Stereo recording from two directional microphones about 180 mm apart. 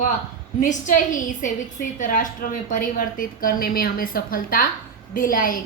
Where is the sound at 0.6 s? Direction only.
45° left (ahead or behind).